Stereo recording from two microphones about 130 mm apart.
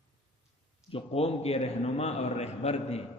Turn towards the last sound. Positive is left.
turn(degrees=55)  # may be behind; listen again after turning